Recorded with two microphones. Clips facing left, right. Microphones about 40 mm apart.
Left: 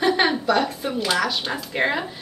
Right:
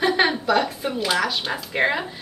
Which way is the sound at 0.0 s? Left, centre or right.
Centre.